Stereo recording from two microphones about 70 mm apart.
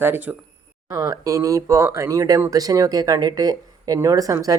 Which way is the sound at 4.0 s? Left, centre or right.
Right.